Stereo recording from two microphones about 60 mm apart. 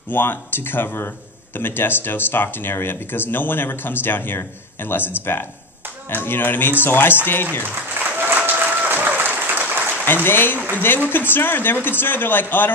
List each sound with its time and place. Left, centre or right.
0.1 s speech: left
8.0 s applause: right
10.2 s speech: left